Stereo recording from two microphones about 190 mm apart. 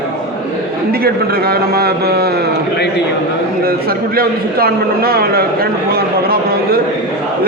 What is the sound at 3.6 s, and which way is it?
A man's voice, 50° right (ahead or behind).